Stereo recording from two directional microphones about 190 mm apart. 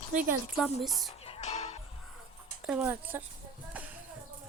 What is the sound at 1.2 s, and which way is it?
Music, 35° left (ahead or behind).